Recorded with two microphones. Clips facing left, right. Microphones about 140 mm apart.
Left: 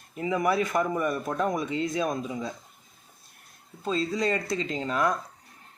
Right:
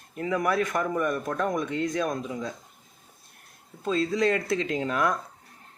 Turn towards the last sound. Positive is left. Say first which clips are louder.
# right 1 dB
turn(degrees=0)  # may be behind; listen again after turning